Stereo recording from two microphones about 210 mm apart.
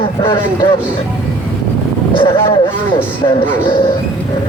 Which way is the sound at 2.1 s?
25° left (ahead or behind).